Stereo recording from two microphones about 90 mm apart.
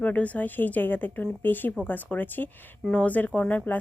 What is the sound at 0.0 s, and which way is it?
Speech, 15° left (ahead or behind).